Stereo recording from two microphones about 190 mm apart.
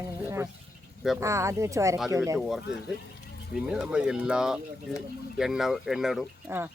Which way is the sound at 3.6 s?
5° right (ahead or behind).